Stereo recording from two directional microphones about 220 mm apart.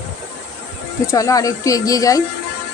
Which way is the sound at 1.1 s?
15° left (ahead or behind).